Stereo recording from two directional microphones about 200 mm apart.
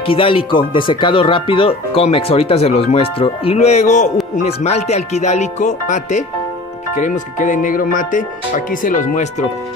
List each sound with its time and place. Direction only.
0.0 s speech: 25° left (ahead or behind)